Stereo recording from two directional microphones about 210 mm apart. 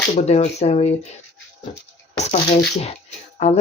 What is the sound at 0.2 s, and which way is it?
Speech, 30° left (ahead or behind).